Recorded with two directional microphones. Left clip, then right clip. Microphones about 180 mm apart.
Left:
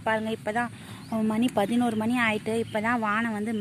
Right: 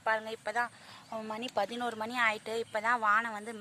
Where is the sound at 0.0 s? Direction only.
Centre (ahead or behind).